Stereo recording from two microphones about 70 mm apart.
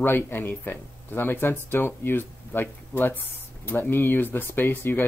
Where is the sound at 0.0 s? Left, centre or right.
Left.